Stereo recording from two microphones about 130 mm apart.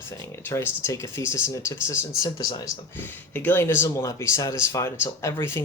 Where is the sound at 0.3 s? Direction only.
20° left (ahead or behind).